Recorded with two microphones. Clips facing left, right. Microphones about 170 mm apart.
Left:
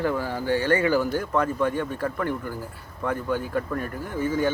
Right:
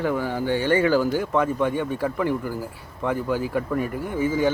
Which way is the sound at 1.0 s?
5° right (ahead or behind).